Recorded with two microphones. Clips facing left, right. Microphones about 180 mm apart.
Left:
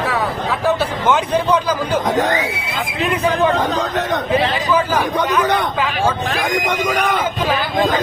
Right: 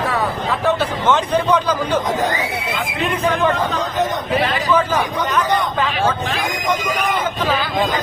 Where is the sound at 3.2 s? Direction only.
35° left (ahead or behind).